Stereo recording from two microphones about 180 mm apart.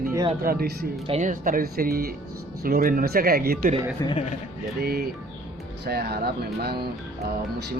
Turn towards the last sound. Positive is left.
turn(degrees=-60)  # may be behind; listen again after turning